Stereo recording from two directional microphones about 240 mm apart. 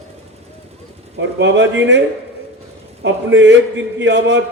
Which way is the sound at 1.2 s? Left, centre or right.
Right.